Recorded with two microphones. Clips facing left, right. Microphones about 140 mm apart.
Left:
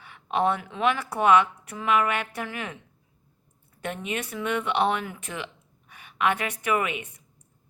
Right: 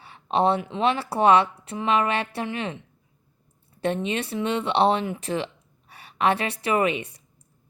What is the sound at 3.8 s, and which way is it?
Speech, 30° right (ahead or behind).